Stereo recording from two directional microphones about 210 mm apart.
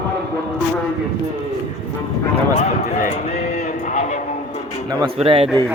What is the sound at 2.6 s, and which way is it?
Music, 35° left (ahead or behind).